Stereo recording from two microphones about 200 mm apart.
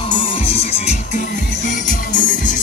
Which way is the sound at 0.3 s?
30° left (ahead or behind).